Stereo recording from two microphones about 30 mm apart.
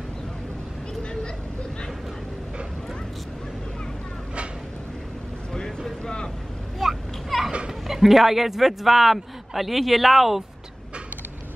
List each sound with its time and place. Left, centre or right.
6.0 s vehicle: left
6.8 s a sound: centre
7.9 s a man's voice: centre